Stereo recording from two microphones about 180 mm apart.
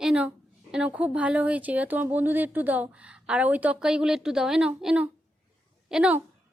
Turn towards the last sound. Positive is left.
turn(degrees=-5)  # may be behind; listen again after turning